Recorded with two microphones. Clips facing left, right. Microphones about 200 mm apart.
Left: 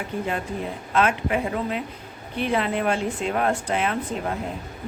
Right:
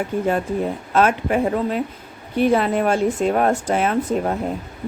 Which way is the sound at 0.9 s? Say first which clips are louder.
Right 4 dB; 45° right (ahead or behind).